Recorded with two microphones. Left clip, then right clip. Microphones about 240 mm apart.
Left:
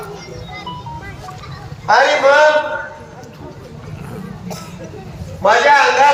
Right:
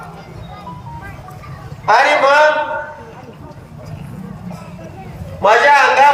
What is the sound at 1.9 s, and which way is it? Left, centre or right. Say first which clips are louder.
Speech: even; right.